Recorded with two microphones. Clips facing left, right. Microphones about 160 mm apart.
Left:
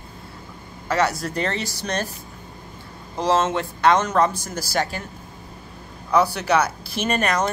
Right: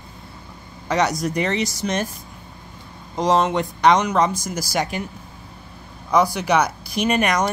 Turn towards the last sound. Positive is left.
turn(degrees=-10)  # may be behind; listen again after turning